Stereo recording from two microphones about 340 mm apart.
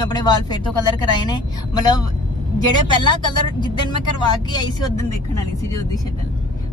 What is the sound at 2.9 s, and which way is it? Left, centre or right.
Speech, centre.